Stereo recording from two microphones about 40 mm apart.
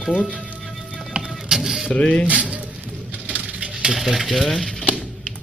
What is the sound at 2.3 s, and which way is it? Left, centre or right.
Speech, right.